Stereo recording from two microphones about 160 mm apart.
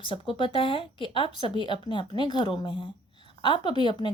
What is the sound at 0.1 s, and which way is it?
A woman's voice, 30° left (ahead or behind).